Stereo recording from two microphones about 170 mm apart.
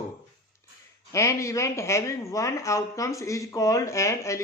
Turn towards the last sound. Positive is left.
turn(degrees=15)  # may be behind; listen again after turning